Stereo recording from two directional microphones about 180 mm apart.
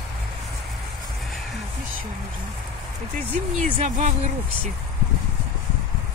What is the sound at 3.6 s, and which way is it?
Speech, 40° right (ahead or behind).